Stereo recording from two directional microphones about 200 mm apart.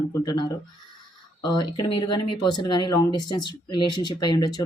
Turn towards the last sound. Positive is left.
turn(degrees=20)  # may be behind; listen again after turning